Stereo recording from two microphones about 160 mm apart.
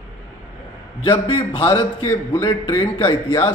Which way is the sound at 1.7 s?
15° left (ahead or behind).